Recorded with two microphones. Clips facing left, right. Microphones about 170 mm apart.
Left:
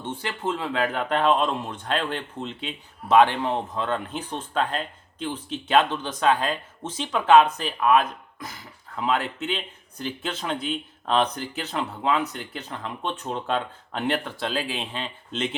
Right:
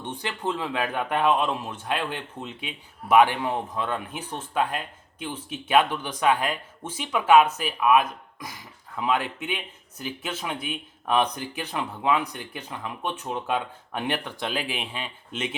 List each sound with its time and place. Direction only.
0.0 s speech: 15° right (ahead or behind)